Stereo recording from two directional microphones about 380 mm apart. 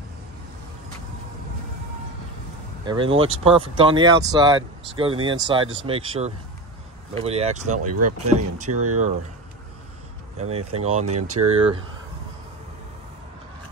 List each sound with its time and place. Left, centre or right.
2.8 s speech: centre
7.8 s speech: right
10.3 s speech: centre
11.1 s speech: right
11.4 s speech: centre